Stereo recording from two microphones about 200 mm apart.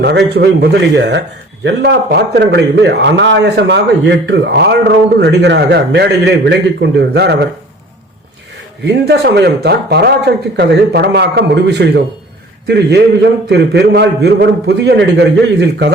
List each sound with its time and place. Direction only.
0.0 s speech: 55° right (ahead or behind)
8.8 s speech: 55° right (ahead or behind)